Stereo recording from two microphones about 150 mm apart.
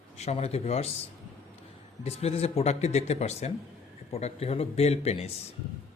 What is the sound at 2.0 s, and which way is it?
Speech, 45° left (ahead or behind).